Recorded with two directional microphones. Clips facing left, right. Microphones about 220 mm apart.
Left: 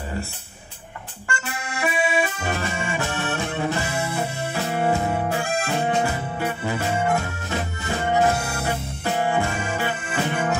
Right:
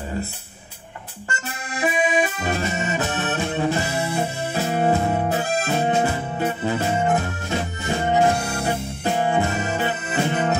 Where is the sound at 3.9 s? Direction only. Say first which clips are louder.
Right 2 dB; 25° right (ahead or behind).